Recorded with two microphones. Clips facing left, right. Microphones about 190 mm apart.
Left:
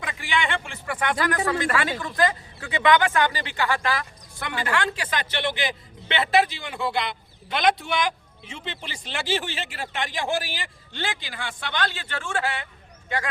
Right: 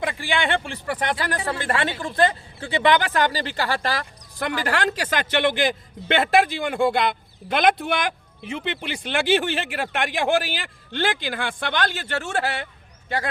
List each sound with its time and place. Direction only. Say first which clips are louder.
0.2 s speech: left 1 dB; 30° right (ahead or behind)